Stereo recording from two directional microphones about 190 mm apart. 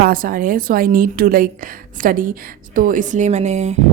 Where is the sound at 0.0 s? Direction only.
50° right (ahead or behind).